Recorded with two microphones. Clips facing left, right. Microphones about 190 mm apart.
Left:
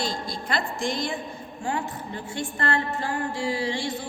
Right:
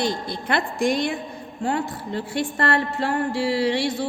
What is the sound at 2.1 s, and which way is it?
Music, 70° right (ahead or behind).